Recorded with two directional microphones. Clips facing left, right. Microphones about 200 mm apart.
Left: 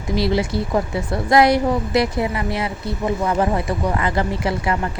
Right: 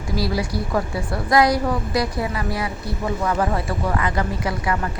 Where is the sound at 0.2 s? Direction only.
25° left (ahead or behind).